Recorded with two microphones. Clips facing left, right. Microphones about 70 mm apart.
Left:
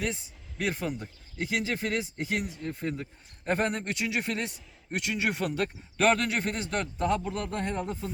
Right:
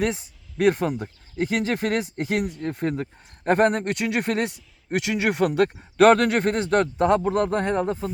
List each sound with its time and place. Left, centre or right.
0.6 s speech: right